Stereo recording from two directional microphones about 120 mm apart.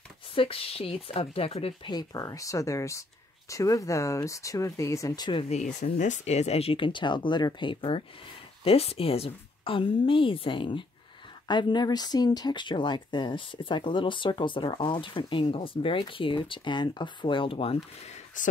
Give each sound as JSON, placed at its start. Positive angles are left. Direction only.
{"t": 0.3, "sound": "speech", "side_deg": 50}
{"t": 1.9, "sound": "speech", "side_deg": 30}
{"t": 5.5, "sound": "speech", "side_deg": 85}
{"t": 18.0, "sound": "a sound", "side_deg": 80}